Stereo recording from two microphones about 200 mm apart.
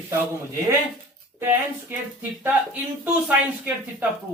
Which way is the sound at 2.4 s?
10° right (ahead or behind).